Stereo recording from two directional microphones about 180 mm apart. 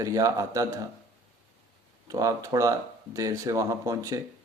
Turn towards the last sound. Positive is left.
turn(degrees=-15)  # may be behind; listen again after turning